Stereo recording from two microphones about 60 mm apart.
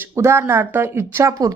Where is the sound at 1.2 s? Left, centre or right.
Right.